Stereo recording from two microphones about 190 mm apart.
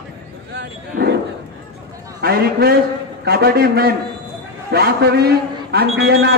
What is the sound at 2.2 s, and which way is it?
A man's voice, 55° right (ahead or behind).